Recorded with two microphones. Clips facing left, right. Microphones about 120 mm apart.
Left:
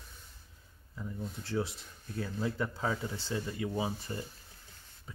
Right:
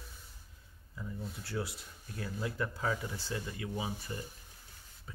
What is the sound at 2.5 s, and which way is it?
Speech, 20° left (ahead or behind).